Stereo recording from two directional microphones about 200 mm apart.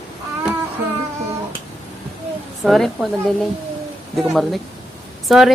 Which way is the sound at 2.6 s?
Centre (ahead or behind).